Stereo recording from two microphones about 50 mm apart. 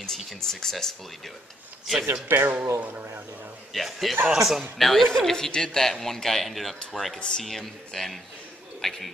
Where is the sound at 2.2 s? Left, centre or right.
Right.